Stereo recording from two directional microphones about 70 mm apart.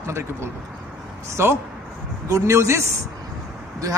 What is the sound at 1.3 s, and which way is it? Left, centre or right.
A man's voice, right.